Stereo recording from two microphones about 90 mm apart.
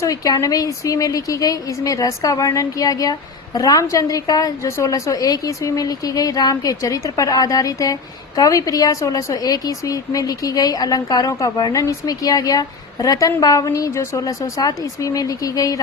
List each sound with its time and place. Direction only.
0.0 s speech: 40° left (ahead or behind)